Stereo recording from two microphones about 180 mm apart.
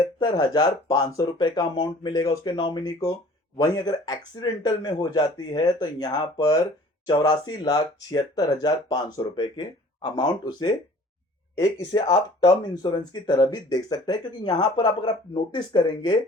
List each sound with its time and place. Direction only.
0.0 s speech: 20° left (ahead or behind)